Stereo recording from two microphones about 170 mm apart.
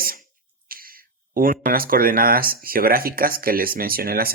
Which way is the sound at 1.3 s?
55° right (ahead or behind).